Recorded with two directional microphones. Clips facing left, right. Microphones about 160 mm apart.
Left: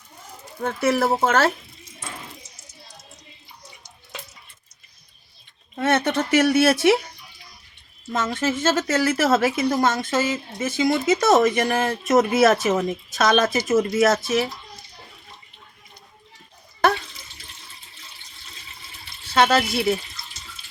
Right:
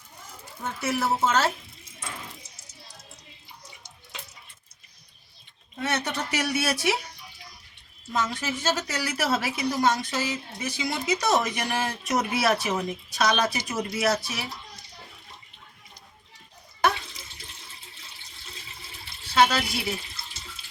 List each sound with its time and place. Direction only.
0.6 s speech: 60° left (ahead or behind)
5.7 s speech: 55° left (ahead or behind)
8.1 s a woman's voice: 50° left (ahead or behind)
19.3 s speech: 50° left (ahead or behind)